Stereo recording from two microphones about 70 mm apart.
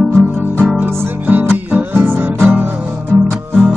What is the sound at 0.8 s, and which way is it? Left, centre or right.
Music, right.